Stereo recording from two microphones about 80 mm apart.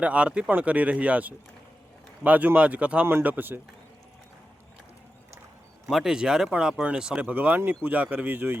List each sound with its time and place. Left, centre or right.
0.0 s speech: centre
5.9 s speech: centre; by 8.5 s right